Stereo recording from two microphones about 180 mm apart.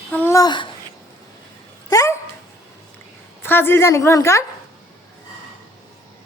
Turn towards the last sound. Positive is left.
turn(degrees=15)  # may be behind; listen again after turning